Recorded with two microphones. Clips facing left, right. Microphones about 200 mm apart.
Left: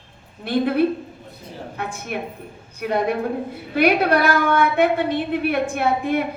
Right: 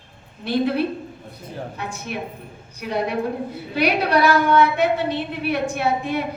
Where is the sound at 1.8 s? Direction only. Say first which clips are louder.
Left 4 dB; 55° left (ahead or behind).